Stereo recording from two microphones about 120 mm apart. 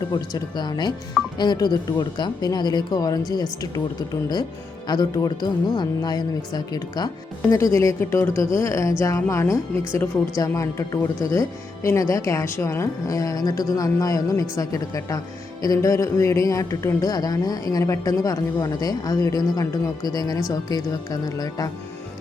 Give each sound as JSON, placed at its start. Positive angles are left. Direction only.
{"t": 0.1, "sound": "speech", "side_deg": 40}